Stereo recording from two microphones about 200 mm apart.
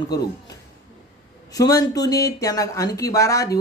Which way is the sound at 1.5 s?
20° left (ahead or behind).